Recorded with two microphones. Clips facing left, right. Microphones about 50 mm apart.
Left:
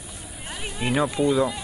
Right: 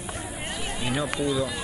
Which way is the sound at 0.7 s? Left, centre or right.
Left.